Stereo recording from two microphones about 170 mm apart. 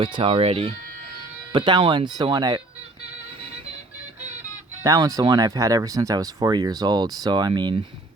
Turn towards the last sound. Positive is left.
turn(degrees=-25)  # may be behind; listen again after turning